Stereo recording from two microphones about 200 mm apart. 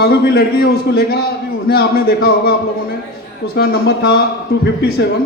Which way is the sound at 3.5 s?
50° left (ahead or behind).